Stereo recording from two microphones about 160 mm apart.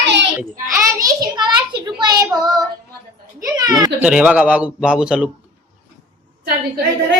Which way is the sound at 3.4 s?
25° right (ahead or behind).